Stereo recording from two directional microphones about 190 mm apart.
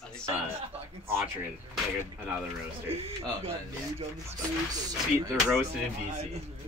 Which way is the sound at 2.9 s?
30° right (ahead or behind).